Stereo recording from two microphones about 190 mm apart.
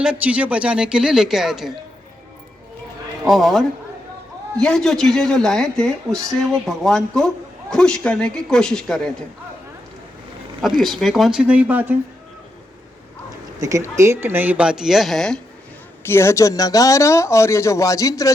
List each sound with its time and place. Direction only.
0.0 s speech: 5° right (ahead or behind)
3.2 s speech: centre (ahead or behind)
10.8 s speech: centre (ahead or behind)
13.6 s speech: 15° right (ahead or behind); by 15.4 s centre (ahead or behind)
16.0 s speech: 15° left (ahead or behind)